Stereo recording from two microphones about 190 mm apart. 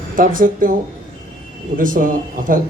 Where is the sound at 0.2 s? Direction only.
45° right (ahead or behind).